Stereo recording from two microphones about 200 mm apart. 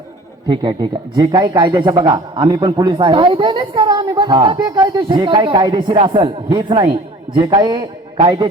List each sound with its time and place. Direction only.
0.4 s a man's voice: 25° right (ahead or behind)